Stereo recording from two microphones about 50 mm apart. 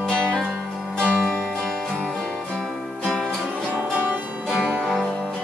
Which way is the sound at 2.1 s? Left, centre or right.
Centre.